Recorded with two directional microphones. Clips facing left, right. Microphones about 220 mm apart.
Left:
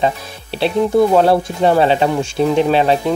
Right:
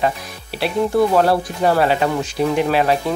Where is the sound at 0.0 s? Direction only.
25° left (ahead or behind).